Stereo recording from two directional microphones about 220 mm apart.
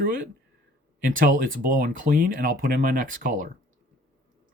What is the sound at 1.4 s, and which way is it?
Speech, 40° right (ahead or behind).